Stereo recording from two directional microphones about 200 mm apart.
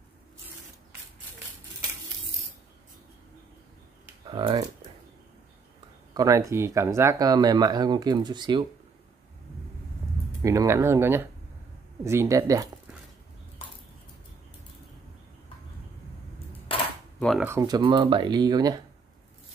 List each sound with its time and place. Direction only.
4.3 s speech: 25° right (ahead or behind)
6.1 s speech: 15° right (ahead or behind)
10.4 s speech: 15° right (ahead or behind)
17.2 s speech: centre (ahead or behind)
17.5 s speech: 20° right (ahead or behind)